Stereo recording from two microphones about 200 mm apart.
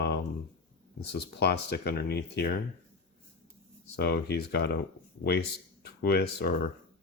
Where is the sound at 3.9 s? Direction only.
55° left (ahead or behind).